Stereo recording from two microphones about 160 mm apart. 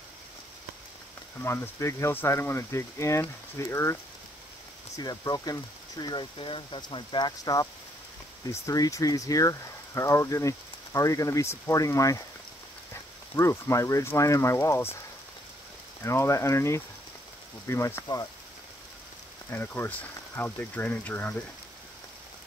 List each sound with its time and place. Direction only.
1.4 s speech: 15° left (ahead or behind)
13.4 s speech: 20° left (ahead or behind)
16.0 s speech: 15° left (ahead or behind)
19.5 s speech: 10° left (ahead or behind)